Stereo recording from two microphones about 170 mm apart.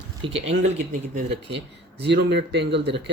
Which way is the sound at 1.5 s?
85° right.